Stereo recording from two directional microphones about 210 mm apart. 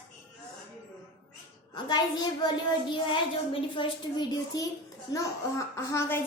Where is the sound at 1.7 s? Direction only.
20° left (ahead or behind).